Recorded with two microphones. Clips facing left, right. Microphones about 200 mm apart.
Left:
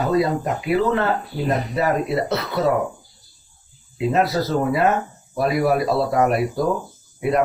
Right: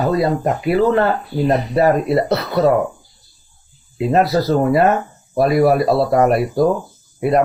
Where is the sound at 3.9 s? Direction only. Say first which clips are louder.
Right 4 dB; 40° right (ahead or behind).